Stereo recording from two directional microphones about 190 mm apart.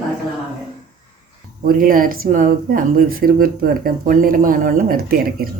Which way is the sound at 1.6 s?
50° right (ahead or behind).